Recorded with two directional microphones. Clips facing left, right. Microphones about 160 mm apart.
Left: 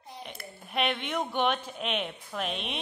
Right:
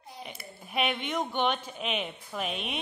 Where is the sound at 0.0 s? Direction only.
Centre (ahead or behind).